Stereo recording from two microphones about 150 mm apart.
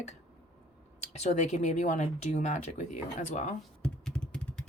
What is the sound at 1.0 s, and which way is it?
Speech, 50° left (ahead or behind).